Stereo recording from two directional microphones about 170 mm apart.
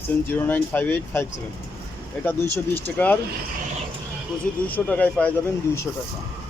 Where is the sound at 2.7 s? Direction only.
10° left (ahead or behind).